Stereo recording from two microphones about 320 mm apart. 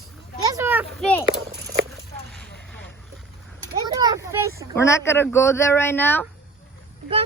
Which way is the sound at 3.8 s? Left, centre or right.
Centre.